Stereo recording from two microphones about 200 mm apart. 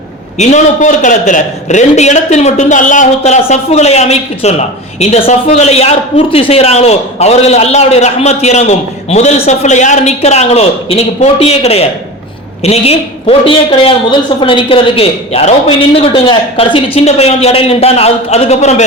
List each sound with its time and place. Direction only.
0.3 s a man's voice: 35° left (ahead or behind)